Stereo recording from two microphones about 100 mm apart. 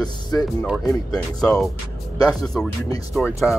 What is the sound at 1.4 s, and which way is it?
Speech, 5° left (ahead or behind).